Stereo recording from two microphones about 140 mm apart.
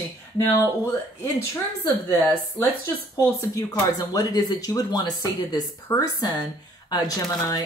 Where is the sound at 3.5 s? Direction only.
30° left (ahead or behind).